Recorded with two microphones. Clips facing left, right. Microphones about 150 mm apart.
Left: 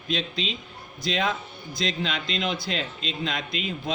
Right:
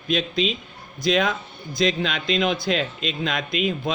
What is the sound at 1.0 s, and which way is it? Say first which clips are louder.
A man's voice: right 5 dB; 75° right (ahead or behind).